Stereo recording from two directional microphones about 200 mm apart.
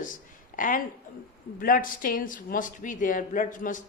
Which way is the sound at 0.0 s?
40° left (ahead or behind).